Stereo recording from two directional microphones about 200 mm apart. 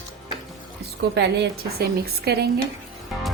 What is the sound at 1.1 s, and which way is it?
A woman's voice, 55° right (ahead or behind).